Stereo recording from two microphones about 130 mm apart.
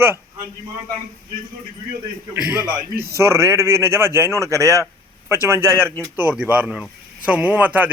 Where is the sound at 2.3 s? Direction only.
15° right (ahead or behind).